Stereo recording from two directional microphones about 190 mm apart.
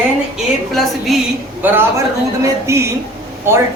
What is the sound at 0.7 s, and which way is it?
A woman's voice, centre (ahead or behind).